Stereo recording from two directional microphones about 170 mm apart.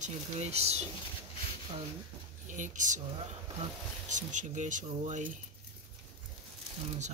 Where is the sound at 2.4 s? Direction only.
50° right (ahead or behind).